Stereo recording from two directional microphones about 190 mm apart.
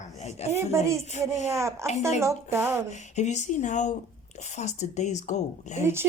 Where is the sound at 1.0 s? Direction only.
35° left (ahead or behind).